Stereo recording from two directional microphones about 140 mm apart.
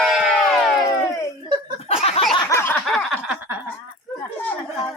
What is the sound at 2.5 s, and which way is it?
Snicker, 15° left (ahead or behind).